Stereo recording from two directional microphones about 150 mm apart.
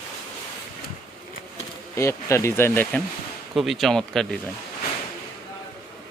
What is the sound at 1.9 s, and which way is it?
Speech, 20° left (ahead or behind).